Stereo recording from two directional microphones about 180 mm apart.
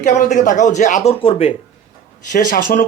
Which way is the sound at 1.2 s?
30° left (ahead or behind).